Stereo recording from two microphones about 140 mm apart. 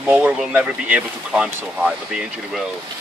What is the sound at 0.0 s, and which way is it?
Speech, 10° right (ahead or behind).